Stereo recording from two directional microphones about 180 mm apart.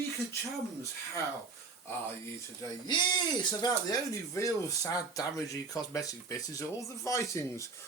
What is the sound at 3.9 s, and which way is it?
Speech, 20° left (ahead or behind).